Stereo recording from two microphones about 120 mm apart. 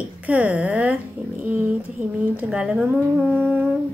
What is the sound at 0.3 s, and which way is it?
Speech, 10° right (ahead or behind).